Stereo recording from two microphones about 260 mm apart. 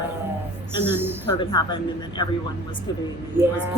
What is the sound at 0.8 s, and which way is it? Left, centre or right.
Speech, centre.